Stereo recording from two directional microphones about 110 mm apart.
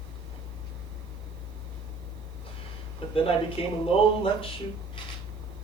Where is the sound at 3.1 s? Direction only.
55° left (ahead or behind).